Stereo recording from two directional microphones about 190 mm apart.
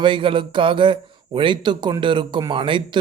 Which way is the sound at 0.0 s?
25° right (ahead or behind).